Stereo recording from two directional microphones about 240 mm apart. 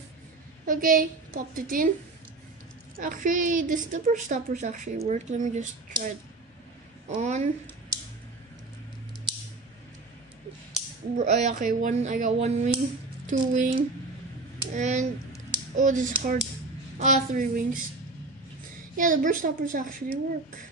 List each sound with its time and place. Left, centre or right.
0.7 s a woman's voice: right
3.0 s a woman's voice: right
7.2 s speech: right
11.1 s a woman's voice: right
18.9 s a woman's voice: right